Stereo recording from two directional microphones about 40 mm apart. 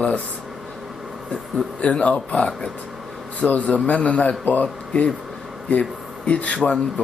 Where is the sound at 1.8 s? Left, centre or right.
Left.